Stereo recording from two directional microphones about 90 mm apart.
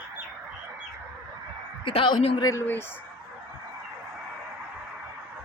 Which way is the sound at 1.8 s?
70° left (ahead or behind).